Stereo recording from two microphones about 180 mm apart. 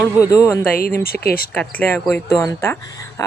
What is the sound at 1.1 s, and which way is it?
Speech, 55° left (ahead or behind).